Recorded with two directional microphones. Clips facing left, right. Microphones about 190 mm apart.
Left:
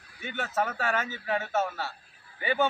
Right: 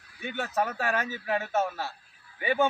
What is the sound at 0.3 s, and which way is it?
A man's voice, 15° right (ahead or behind).